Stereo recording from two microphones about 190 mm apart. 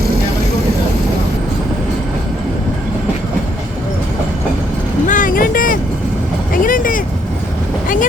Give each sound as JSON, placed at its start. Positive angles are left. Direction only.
{"t": 5.0, "sound": "vehicle", "side_deg": 45}